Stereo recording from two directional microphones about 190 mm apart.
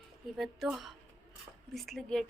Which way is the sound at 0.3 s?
Centre (ahead or behind).